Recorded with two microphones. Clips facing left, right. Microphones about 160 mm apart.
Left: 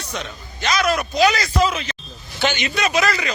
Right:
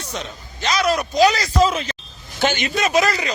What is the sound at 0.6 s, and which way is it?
Speech, 30° right (ahead or behind).